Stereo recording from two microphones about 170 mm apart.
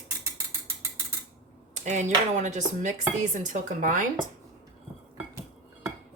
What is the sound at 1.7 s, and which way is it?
Speech, 45° right (ahead or behind).